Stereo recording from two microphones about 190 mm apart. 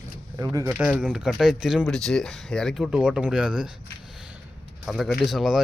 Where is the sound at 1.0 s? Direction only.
5° right (ahead or behind).